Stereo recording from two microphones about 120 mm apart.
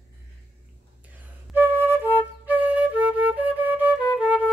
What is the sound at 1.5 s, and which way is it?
Flute, 20° right (ahead or behind).